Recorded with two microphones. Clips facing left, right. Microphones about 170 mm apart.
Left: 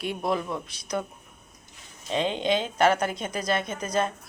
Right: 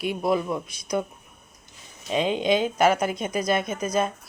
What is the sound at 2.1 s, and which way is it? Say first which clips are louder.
A woman's voice: right 3 dB; 10° right (ahead or behind).